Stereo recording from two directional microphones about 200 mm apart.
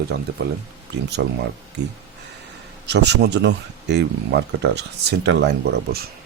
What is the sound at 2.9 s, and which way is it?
Speech, 60° right (ahead or behind).